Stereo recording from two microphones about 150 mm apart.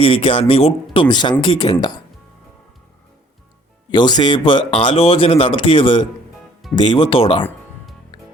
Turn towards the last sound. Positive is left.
turn(degrees=40)  # may be behind; listen again after turning